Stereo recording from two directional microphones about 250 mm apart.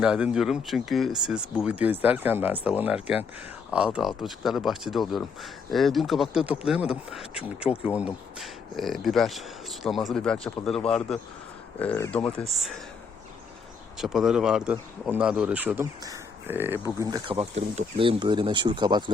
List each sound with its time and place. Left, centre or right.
0.0 s speech: centre
14.0 s speech: centre